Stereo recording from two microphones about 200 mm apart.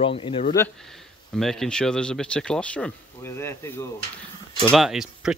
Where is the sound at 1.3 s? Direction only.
Centre (ahead or behind).